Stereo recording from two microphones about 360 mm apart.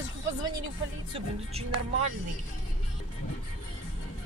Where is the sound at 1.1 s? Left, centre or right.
Centre.